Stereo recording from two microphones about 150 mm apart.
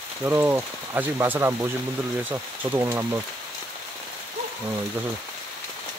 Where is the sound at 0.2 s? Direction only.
15° right (ahead or behind).